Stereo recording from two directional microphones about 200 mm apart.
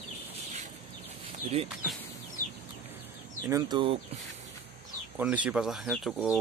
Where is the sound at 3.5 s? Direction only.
25° right (ahead or behind).